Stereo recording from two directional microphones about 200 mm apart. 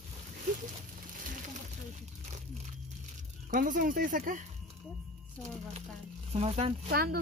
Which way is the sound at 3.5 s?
40° right (ahead or behind).